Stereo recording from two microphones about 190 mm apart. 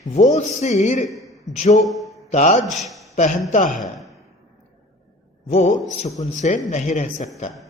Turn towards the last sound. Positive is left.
turn(degrees=35)  # may be behind; listen again after turning